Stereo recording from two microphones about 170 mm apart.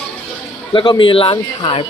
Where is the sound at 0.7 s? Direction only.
30° left (ahead or behind).